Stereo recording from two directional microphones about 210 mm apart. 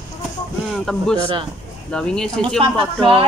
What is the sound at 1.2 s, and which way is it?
Speech, 25° right (ahead or behind).